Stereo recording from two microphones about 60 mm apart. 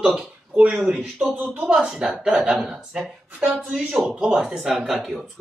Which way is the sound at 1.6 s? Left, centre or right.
Centre.